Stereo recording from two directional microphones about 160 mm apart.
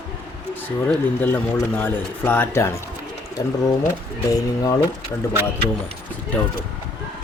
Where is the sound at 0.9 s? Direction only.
10° left (ahead or behind).